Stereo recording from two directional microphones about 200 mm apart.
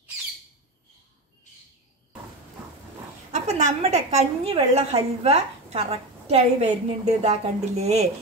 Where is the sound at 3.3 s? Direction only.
35° right (ahead or behind).